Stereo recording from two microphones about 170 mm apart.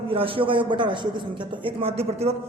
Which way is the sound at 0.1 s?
30° right (ahead or behind).